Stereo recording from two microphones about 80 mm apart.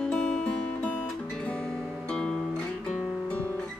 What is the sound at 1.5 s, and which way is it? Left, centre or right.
Guitar, centre.